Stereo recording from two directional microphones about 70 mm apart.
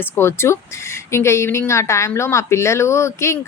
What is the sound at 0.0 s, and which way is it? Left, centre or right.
A woman's voice, left.